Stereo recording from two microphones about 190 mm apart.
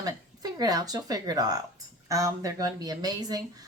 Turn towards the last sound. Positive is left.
turn(degrees=-20)  # may be behind; listen again after turning